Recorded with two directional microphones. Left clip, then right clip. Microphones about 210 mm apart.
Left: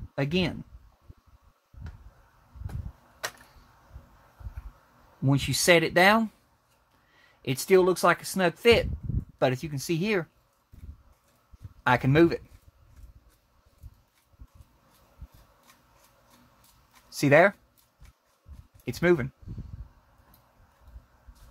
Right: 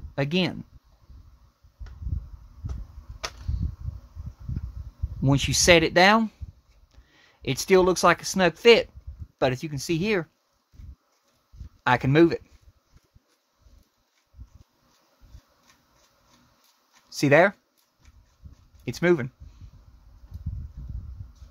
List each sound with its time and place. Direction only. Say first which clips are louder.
0.1 s speech: right 2 dB; 30° right (ahead or behind)
5.2 s speech: right 4 dB; 30° right (ahead or behind)
11.8 s speech: right 2 dB; 25° right (ahead or behind)
17.1 s speech: right 1 dB; 25° right (ahead or behind)
18.9 s speech: right 1 dB; 25° right (ahead or behind)